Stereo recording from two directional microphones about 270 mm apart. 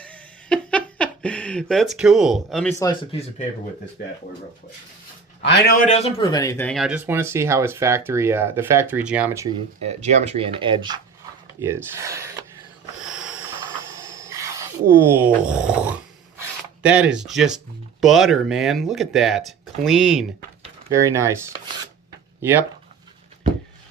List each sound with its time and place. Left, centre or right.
0.0 s speech: centre
5.4 s speech: left; by 9.6 s centre
9.8 s speech: right
11.6 s a sound: centre
16.4 s speech: centre